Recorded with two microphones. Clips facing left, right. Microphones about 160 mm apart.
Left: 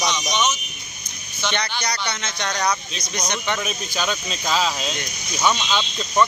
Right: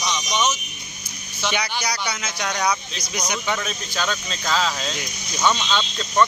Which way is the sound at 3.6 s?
15° left (ahead or behind).